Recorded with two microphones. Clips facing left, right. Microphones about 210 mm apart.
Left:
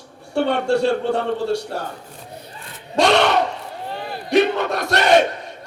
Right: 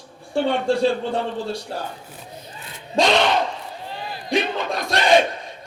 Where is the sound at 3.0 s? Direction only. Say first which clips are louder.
Left 2 dB; 70° left (ahead or behind).